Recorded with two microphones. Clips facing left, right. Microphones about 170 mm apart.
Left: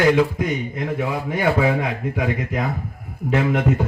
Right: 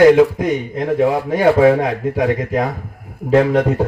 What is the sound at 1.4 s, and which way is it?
Speech, 40° right (ahead or behind).